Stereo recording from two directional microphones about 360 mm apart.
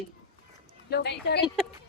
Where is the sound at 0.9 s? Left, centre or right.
Left.